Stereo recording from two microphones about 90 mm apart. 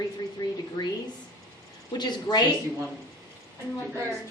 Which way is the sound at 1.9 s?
50° left (ahead or behind).